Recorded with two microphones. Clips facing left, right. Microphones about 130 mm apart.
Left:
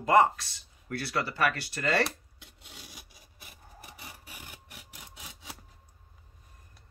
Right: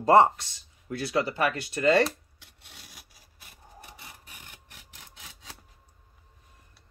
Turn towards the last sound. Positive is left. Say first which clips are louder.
# left 2 dB
turn(degrees=10)  # may be behind; listen again after turning